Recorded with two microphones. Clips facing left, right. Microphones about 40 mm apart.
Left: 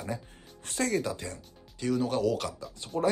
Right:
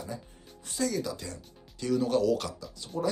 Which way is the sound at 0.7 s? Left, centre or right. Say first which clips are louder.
Even; left.